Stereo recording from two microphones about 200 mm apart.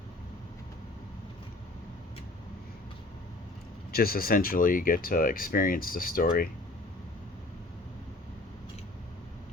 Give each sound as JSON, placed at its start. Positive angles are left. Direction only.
{"t": 3.9, "sound": "speech", "side_deg": 50}